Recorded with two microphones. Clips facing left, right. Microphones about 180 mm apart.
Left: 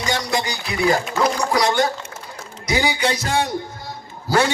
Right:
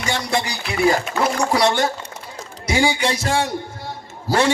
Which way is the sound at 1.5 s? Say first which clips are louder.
Right 1 dB; 30° right (ahead or behind).